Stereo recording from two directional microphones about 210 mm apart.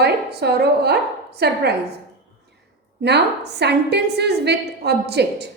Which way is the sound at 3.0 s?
55° right (ahead or behind).